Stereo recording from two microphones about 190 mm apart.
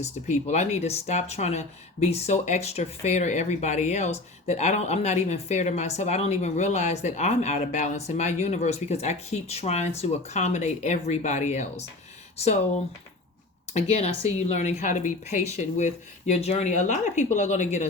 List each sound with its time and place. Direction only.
0.0 s speech: 35° left (ahead or behind)
13.7 s speech: 35° left (ahead or behind)